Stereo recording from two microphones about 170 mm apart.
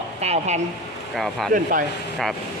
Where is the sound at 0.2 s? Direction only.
40° right (ahead or behind).